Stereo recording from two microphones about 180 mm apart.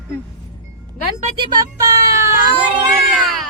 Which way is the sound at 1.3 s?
25° right (ahead or behind).